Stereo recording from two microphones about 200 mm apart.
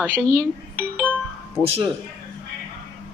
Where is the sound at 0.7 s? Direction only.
10° right (ahead or behind).